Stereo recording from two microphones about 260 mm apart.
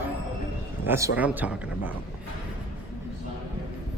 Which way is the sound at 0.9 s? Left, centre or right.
Centre.